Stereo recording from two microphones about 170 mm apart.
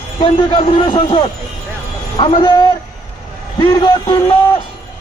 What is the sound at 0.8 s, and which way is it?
A man's voice, 25° left (ahead or behind).